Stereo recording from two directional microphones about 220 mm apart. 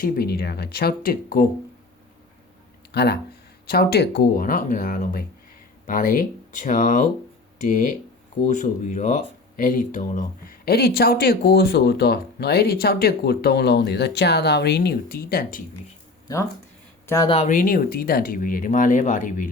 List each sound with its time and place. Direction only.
0.0 s speech: 45° left (ahead or behind)
2.9 s speech: 45° left (ahead or behind)
17.1 s speech: 20° left (ahead or behind); by 19.5 s 35° left (ahead or behind)